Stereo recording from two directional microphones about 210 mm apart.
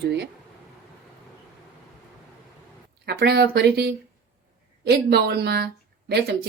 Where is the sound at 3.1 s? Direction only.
50° right (ahead or behind).